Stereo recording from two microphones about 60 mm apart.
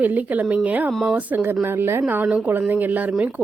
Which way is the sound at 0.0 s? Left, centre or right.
Right.